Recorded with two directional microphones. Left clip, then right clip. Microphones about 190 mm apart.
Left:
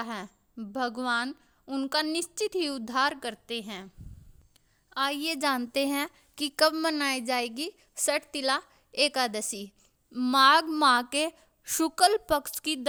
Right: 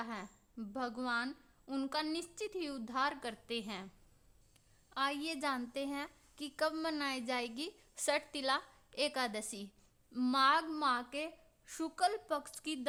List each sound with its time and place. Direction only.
0.0 s a woman's voice: 40° left (ahead or behind)
4.9 s a woman's voice: 35° left (ahead or behind)
10.3 s a woman's voice: 50° left (ahead or behind)